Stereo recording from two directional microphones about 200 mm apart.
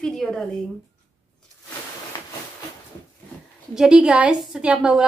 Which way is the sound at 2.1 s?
20° left (ahead or behind).